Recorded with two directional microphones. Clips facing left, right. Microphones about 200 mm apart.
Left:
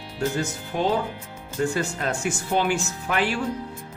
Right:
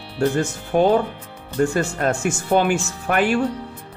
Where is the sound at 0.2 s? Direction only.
55° right (ahead or behind).